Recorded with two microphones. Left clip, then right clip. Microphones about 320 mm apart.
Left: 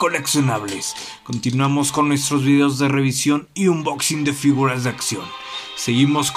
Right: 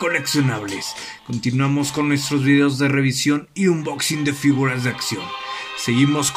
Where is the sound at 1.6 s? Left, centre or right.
Centre.